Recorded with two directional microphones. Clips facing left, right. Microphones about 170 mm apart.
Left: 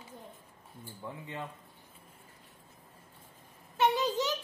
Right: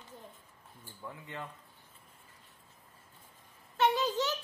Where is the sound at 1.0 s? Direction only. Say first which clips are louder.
Left 2 dB; 20° left (ahead or behind).